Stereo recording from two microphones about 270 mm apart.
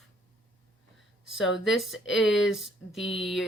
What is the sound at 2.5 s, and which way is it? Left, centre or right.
Speech, centre.